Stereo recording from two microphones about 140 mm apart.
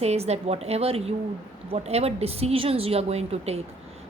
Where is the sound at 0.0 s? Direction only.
50° right (ahead or behind).